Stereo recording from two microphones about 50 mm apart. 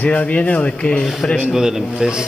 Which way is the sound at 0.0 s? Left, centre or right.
Left.